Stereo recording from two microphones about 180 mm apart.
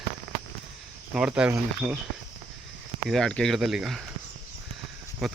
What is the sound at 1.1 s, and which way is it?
Speech, 5° right (ahead or behind).